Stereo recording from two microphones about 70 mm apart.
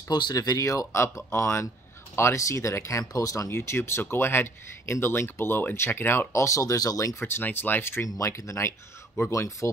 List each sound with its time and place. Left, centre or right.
0.1 s speech: left
3.5 s speech: left
7.2 s speech: left